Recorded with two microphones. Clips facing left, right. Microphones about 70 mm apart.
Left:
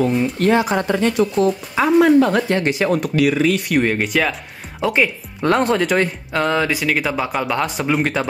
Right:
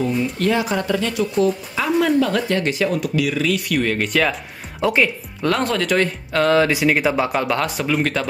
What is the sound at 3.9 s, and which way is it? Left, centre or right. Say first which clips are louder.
Speech: even; centre.